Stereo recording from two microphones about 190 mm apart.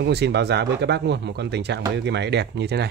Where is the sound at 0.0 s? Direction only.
60° right (ahead or behind).